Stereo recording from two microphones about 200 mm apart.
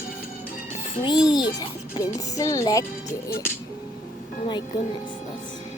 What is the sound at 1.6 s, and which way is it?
Speech, 15° left (ahead or behind).